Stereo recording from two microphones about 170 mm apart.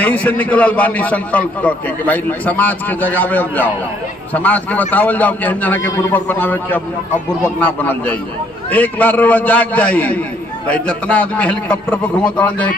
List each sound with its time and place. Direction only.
0.0 s a man's voice: 10° left (ahead or behind)